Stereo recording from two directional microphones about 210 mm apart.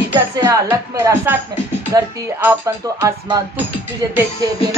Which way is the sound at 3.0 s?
10° right (ahead or behind).